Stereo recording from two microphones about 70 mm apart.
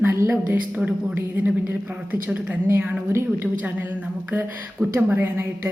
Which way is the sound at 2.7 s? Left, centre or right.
Right.